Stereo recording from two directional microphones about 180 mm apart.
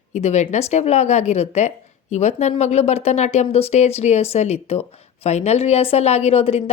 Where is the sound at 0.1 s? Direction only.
40° left (ahead or behind).